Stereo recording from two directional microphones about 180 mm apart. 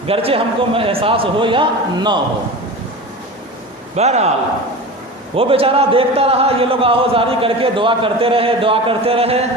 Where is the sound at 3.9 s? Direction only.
35° right (ahead or behind).